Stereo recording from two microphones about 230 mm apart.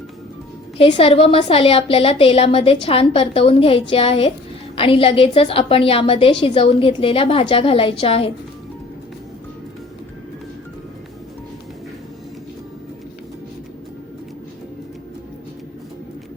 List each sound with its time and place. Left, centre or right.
0.8 s a woman's voice: left